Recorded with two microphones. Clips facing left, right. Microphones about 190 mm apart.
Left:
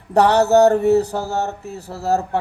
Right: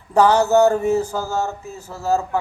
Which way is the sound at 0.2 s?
70° left (ahead or behind).